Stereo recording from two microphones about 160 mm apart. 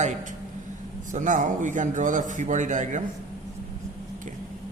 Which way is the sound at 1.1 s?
50° right (ahead or behind).